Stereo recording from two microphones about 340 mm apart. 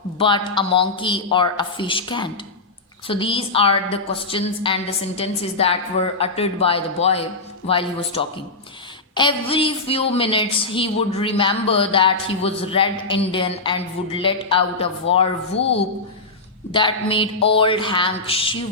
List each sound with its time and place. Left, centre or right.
0.2 s a woman's voice: centre
15.1 s a woman's voice: left
16.7 s a woman's voice: centre